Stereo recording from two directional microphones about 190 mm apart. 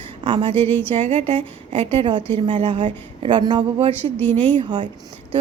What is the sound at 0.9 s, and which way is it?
A woman's voice, 35° right (ahead or behind).